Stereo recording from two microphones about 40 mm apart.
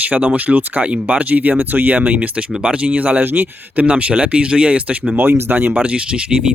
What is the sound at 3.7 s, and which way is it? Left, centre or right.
Speech, right.